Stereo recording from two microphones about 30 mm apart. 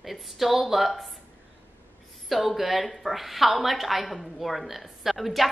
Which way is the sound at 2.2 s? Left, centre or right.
Centre.